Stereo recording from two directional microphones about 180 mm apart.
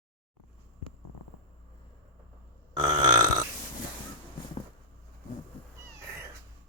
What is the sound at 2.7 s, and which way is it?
Burping, 20° right (ahead or behind).